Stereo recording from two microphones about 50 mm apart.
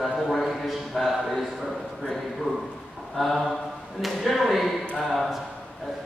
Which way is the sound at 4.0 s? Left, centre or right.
Centre.